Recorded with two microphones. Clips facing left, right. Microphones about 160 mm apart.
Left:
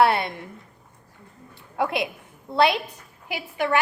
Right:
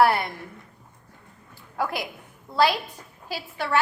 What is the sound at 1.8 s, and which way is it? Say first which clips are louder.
A woman's voice: left 4 dB; 25° left (ahead or behind).